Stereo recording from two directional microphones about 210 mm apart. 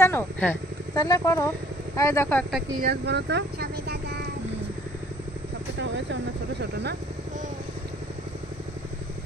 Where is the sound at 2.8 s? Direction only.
50° right (ahead or behind).